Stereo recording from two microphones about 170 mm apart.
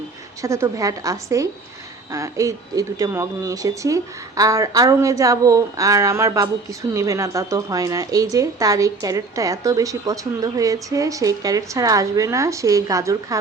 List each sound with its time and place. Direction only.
0.4 s speech: 15° right (ahead or behind)